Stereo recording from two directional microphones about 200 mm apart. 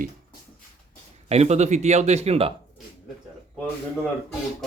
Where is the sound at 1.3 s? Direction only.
35° right (ahead or behind).